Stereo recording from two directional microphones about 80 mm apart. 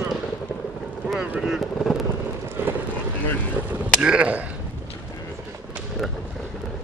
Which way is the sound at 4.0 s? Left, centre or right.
Centre.